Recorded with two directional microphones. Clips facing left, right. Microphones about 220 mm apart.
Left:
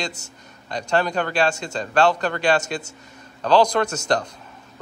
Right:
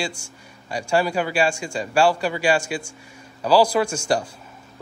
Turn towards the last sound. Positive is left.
turn(degrees=-10)  # may be behind; listen again after turning